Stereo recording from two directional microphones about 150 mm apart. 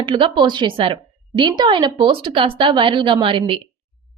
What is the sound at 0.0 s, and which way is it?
A woman's voice, 35° right (ahead or behind).